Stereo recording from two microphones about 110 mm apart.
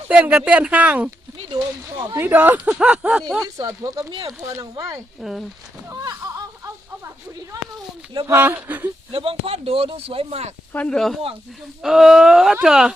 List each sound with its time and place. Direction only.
0.1 s speech: 10° right (ahead or behind)
1.5 s speech: 40° right (ahead or behind)
2.1 s speech: 15° right (ahead or behind)
3.6 s speech: 35° right (ahead or behind)
5.2 s speech: 5° right (ahead or behind)
5.9 s a sound: 35° right (ahead or behind)
8.3 s speech: 20° right (ahead or behind)
9.1 s speech: 55° right (ahead or behind)
10.7 s speech: 10° left (ahead or behind); by 12.9 s 5° right (ahead or behind)